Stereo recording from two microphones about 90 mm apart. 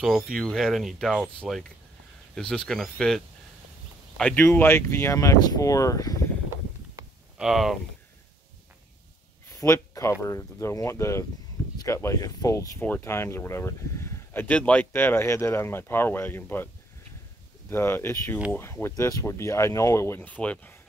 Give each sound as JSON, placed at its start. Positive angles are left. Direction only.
{"t": 0.0, "sound": "speech", "side_deg": 0}
{"t": 4.4, "sound": "speech", "side_deg": 25}
{"t": 7.3, "sound": "speech", "side_deg": -5}
{"t": 9.5, "sound": "speech", "side_deg": 35}
{"t": 17.6, "sound": "speech", "side_deg": 25}
{"t": 20.2, "sound": "speech", "side_deg": 15}